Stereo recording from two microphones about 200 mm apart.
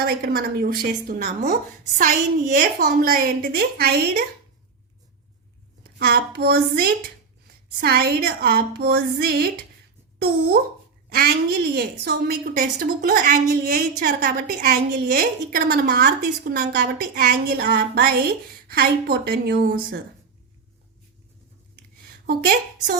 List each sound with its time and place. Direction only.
0.0 s a woman's voice: 50° right (ahead or behind)
6.0 s a woman's voice: 50° right (ahead or behind)
22.3 s a woman's voice: 50° right (ahead or behind)